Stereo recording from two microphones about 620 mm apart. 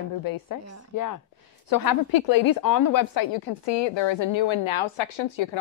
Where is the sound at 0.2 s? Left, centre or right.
Left.